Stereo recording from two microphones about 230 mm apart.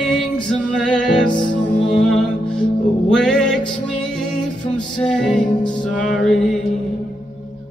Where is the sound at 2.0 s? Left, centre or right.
Centre.